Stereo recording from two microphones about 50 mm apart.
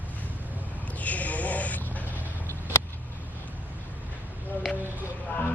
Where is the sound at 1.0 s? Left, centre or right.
Left.